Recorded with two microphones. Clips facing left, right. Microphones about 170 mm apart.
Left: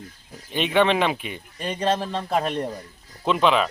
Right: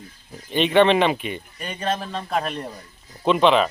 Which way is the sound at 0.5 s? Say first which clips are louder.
Right 4 dB; 5° left (ahead or behind).